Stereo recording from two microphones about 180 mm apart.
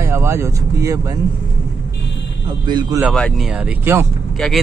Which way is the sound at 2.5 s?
25° right (ahead or behind).